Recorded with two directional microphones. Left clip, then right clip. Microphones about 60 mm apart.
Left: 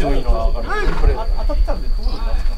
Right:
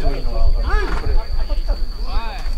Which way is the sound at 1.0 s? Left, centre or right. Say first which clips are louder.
Left 6 dB; left.